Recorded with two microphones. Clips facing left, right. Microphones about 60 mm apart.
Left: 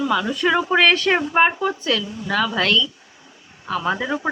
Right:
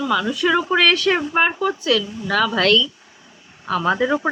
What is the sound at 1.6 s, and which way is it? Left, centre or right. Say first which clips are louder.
Speech: right 2 dB; left.